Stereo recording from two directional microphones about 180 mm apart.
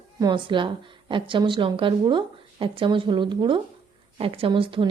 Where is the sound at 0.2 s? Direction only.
25° right (ahead or behind).